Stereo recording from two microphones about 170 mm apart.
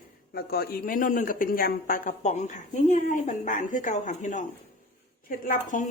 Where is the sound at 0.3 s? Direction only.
65° left (ahead or behind).